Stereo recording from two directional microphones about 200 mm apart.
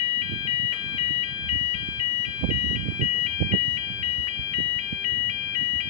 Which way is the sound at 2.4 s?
35° right (ahead or behind).